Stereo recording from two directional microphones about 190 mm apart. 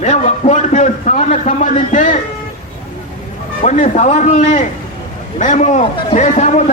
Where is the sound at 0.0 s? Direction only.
40° left (ahead or behind).